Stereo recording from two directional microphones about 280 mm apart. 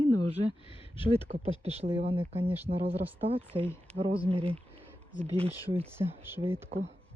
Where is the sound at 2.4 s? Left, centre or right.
Centre.